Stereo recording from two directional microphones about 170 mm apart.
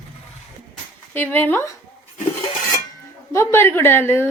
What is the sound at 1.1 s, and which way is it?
Speech, 10° left (ahead or behind).